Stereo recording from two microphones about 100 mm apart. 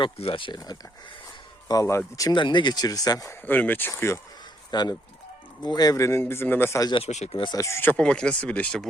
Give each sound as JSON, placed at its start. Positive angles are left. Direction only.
{"t": 0.0, "sound": "speech", "side_deg": 65}
{"t": 1.6, "sound": "speech", "side_deg": 35}
{"t": 2.3, "sound": "speech", "side_deg": 50}
{"t": 3.2, "sound": "a man's voice", "side_deg": 20}
{"t": 4.7, "sound": "speech", "side_deg": 45}
{"t": 6.1, "sound": "a man's voice", "side_deg": 25}
{"t": 6.9, "sound": "speech", "side_deg": 60}
{"t": 7.5, "sound": "speech", "side_deg": 30}
{"t": 7.8, "sound": "speech", "side_deg": 15}